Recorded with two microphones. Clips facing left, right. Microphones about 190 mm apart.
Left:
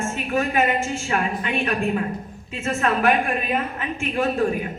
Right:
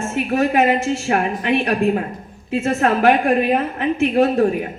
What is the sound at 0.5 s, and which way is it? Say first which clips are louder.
A woman's voice: right 5 dB; 65° right (ahead or behind).